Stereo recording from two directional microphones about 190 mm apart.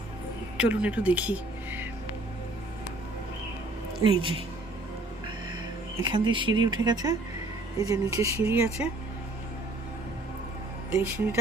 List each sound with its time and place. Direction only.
0.5 s speech: 5° right (ahead or behind)
4.0 s speech: 25° right (ahead or behind)
6.0 s speech: 25° right (ahead or behind)
10.9 s speech: 10° right (ahead or behind)